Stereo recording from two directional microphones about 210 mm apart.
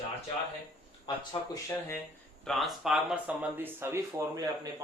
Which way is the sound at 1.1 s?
15° left (ahead or behind).